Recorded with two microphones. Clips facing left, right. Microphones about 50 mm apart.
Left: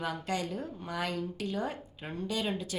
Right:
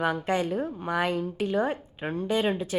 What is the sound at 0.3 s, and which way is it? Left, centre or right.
A woman's voice, right.